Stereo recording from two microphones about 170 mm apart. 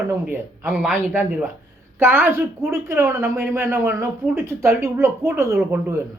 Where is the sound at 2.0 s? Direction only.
15° right (ahead or behind).